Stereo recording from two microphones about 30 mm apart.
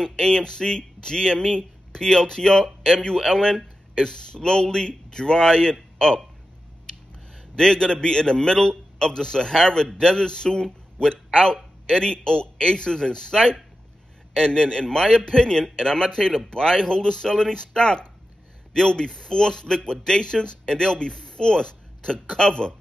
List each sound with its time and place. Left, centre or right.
0.0 s a man's voice: left
7.5 s a man's voice: left